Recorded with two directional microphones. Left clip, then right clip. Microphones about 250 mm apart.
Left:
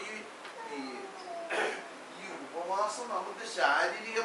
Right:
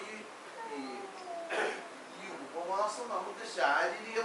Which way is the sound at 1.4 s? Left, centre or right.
Centre.